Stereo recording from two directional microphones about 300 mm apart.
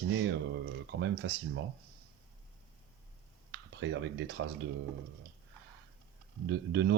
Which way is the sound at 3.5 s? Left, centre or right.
Right.